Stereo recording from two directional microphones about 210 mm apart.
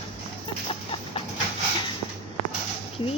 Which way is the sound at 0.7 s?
25° left (ahead or behind).